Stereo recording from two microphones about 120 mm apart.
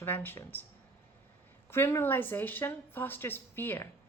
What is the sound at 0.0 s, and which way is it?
Speech, 15° left (ahead or behind).